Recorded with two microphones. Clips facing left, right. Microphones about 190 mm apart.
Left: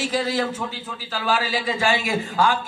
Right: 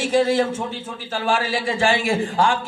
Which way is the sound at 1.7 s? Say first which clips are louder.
Right 3 dB; 30° right (ahead or behind).